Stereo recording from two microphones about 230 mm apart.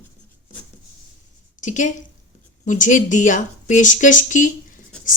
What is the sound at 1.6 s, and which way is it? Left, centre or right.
A woman's voice, left.